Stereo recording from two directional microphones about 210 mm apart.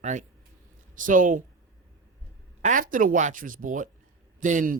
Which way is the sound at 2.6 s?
40° right (ahead or behind).